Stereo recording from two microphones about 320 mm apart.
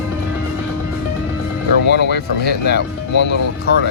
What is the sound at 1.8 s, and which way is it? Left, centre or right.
Speech, left.